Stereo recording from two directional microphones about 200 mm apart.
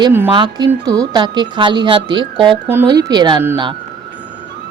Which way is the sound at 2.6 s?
15° right (ahead or behind).